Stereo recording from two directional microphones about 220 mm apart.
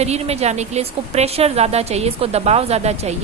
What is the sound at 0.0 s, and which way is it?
A woman's voice, 30° right (ahead or behind).